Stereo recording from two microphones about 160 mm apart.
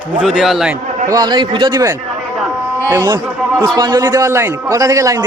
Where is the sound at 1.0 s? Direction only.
25° right (ahead or behind).